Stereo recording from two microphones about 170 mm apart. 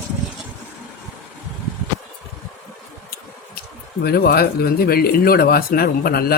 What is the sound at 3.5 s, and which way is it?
Speech, 65° left (ahead or behind).